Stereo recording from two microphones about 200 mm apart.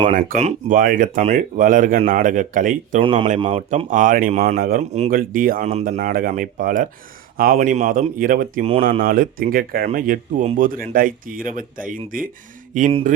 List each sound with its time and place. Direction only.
0.0 s speech: 45° right (ahead or behind)
3.0 s speech: 25° right (ahead or behind)
3.8 s speech: 40° right (ahead or behind)
4.8 s speech: 35° right (ahead or behind)